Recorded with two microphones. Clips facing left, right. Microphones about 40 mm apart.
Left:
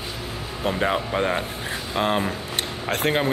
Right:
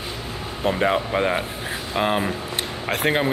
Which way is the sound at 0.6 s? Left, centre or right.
Centre.